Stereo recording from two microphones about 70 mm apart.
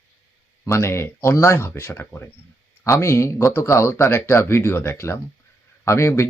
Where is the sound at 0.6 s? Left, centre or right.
Left.